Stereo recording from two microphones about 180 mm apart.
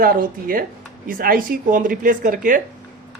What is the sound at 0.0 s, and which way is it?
Speech, 55° right (ahead or behind).